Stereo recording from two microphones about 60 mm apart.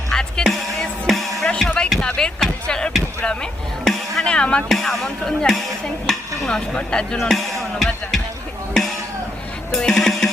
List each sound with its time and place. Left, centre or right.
0.1 s music: centre
1.5 s music: centre
2.0 s a sound: centre
3.2 s music: centre
4.7 s speech: centre
7.2 s music: centre
9.7 s music: centre